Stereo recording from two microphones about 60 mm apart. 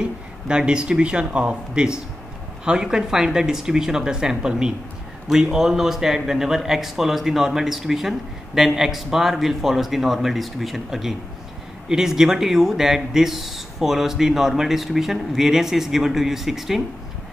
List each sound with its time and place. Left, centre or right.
0.0 s speech: centre